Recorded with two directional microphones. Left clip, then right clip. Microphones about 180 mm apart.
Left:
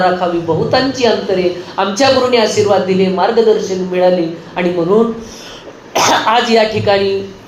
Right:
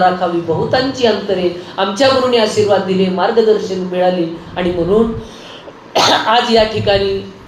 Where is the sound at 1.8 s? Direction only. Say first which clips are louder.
Left 1 dB; 20° left (ahead or behind).